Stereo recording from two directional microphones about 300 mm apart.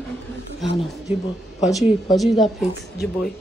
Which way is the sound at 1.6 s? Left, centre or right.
Centre.